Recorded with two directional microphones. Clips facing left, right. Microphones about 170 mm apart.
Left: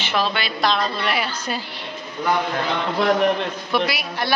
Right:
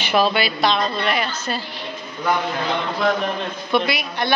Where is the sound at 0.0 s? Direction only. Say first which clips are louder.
Right 5 dB; 10° right (ahead or behind).